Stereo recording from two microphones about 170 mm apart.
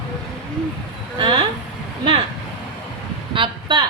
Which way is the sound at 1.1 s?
30° right (ahead or behind).